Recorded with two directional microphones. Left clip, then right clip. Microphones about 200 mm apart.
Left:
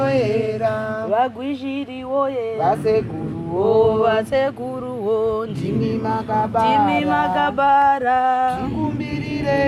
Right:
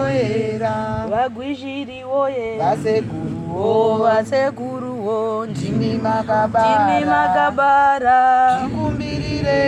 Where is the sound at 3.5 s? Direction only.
5° left (ahead or behind).